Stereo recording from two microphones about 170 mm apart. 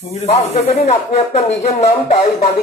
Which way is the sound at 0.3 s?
40° left (ahead or behind).